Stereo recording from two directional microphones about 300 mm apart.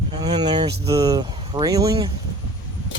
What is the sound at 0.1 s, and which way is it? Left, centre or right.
Speech, centre.